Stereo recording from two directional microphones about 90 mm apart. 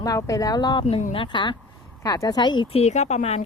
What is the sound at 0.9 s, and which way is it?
Speech, 85° left.